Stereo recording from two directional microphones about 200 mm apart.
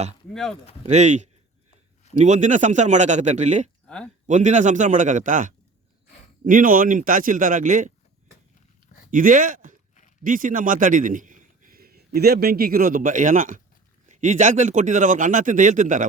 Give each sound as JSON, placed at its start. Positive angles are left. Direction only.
{"t": 0.9, "sound": "speech", "side_deg": -35}
{"t": 3.8, "sound": "speech", "side_deg": 5}
{"t": 4.3, "sound": "speech", "side_deg": -35}
{"t": 9.0, "sound": "a man's voice", "side_deg": -40}